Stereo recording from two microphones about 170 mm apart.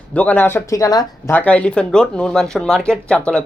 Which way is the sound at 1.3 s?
10° left (ahead or behind).